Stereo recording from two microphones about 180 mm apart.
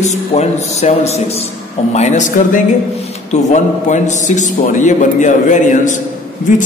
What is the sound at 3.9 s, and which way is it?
A man's voice, 45° left (ahead or behind).